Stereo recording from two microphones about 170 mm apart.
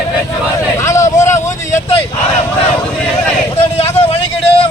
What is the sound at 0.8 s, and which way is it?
Vehicle, 15° left (ahead or behind).